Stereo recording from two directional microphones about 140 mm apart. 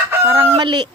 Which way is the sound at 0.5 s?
35° right (ahead or behind).